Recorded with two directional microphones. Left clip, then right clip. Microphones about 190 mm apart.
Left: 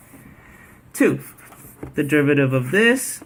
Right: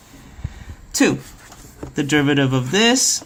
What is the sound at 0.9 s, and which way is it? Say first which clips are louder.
Speech: right 1 dB; 40° right (ahead or behind).